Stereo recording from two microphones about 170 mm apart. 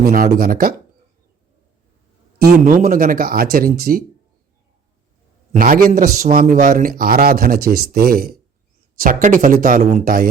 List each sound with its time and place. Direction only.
0.0 s a man's voice: 60° right (ahead or behind)
2.4 s a man's voice: 55° right (ahead or behind)
5.5 s a man's voice: 55° right (ahead or behind)